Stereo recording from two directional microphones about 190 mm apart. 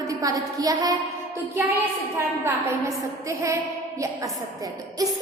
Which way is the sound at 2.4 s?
15° right (ahead or behind).